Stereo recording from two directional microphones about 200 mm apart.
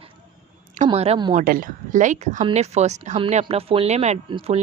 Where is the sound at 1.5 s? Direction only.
45° right (ahead or behind).